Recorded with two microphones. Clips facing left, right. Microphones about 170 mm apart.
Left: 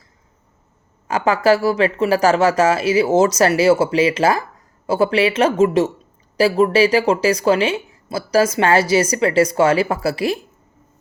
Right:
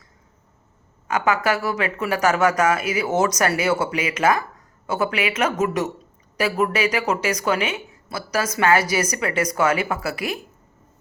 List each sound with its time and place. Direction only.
1.0 s speech: 30° left (ahead or behind)